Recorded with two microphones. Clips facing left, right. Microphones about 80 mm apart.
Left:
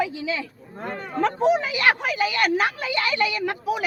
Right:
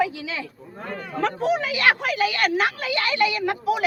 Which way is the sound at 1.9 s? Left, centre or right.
Centre.